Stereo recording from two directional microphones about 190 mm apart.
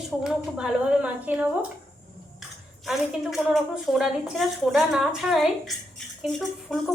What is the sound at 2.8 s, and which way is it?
A woman's voice, centre (ahead or behind).